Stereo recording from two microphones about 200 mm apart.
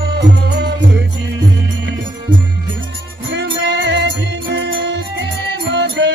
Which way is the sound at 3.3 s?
55° right (ahead or behind).